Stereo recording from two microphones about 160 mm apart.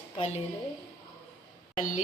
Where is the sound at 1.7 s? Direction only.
55° left (ahead or behind).